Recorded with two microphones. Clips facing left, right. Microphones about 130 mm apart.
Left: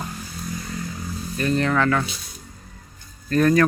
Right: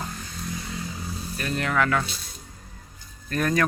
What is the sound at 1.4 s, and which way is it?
Speech, 5° right (ahead or behind).